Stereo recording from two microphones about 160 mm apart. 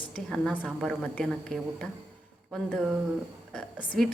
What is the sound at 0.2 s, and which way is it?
A woman's voice, 5° left (ahead or behind).